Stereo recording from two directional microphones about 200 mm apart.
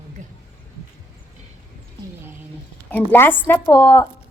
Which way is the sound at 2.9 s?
10° left (ahead or behind).